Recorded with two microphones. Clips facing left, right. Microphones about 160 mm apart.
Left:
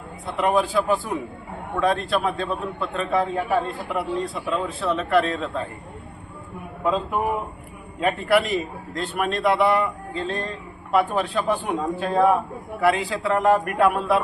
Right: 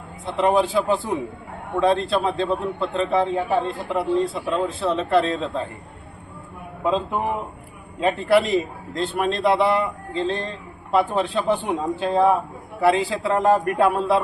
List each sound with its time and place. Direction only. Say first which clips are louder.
0.3 s a man's voice: right 2 dB; 25° right (ahead or behind)
6.8 s a man's voice: even; 25° right (ahead or behind)